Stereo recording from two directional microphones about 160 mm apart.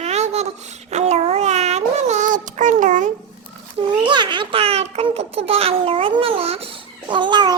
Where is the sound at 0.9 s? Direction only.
45° right (ahead or behind).